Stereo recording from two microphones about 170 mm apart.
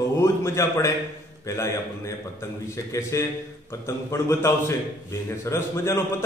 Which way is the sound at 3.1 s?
20° left (ahead or behind).